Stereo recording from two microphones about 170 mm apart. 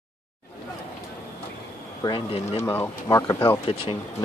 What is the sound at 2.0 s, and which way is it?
Speech, 35° left (ahead or behind).